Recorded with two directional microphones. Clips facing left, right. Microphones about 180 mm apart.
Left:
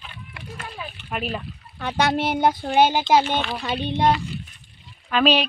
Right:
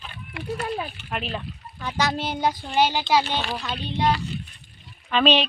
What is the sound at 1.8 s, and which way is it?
Speech, 60° left (ahead or behind).